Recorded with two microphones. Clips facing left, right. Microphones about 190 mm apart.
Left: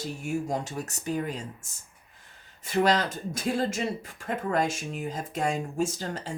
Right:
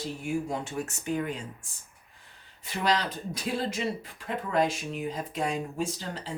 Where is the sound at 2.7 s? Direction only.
45° left (ahead or behind).